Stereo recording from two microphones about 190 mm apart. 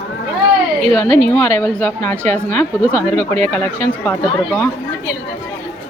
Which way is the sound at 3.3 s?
35° right (ahead or behind).